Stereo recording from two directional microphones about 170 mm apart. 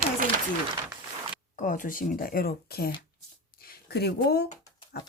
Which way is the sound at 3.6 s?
65° left (ahead or behind).